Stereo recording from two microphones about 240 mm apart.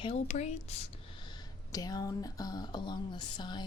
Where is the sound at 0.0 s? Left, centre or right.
Left.